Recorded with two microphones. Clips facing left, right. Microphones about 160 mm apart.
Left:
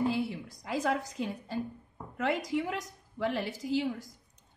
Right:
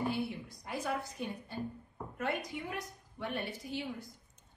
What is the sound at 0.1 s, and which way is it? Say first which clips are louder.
A woman's voice: left 4 dB; 90° left.